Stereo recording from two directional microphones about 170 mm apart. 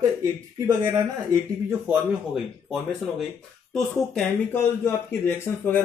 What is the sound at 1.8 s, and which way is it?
Speech, 5° right (ahead or behind).